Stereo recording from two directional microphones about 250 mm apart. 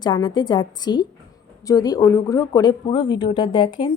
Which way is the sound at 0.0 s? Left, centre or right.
Centre.